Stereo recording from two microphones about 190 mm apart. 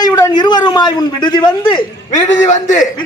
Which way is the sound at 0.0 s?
20° left (ahead or behind).